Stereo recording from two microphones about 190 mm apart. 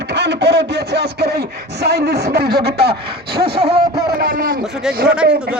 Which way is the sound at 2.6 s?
55° right (ahead or behind).